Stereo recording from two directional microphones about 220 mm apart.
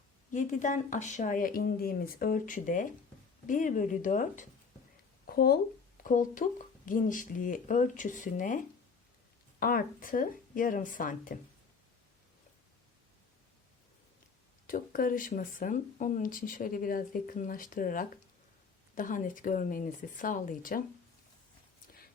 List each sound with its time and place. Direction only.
0.3 s speech: 35° left (ahead or behind)
5.2 s a sound: 45° left (ahead or behind)
6.0 s speech: 40° left (ahead or behind)
14.7 s speech: 40° left (ahead or behind)